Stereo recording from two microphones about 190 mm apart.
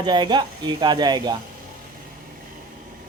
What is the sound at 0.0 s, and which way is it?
Speech, 25° right (ahead or behind).